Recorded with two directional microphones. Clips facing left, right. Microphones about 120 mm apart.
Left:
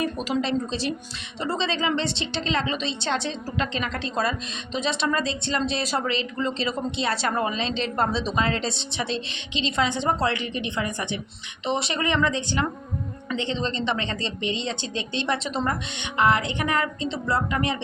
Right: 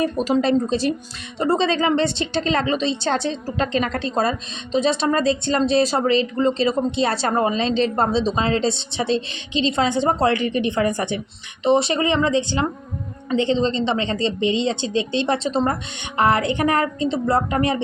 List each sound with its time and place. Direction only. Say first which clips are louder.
0.0 s a woman's voice: right 6 dB; 40° right (ahead or behind)
14.8 s speech: right 8 dB; 35° left (ahead or behind)
15.2 s speech: right 3 dB; 30° right (ahead or behind)